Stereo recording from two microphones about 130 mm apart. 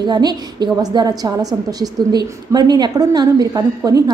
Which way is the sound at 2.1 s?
30° right (ahead or behind).